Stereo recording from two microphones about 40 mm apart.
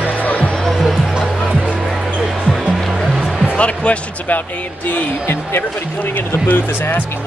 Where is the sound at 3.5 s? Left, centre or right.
Left.